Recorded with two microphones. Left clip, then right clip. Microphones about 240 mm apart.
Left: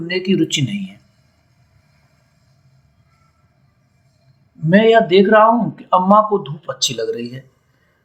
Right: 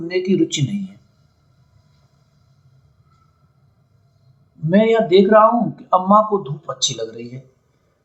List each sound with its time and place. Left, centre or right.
0.1 s a man's voice: left
4.7 s a man's voice: left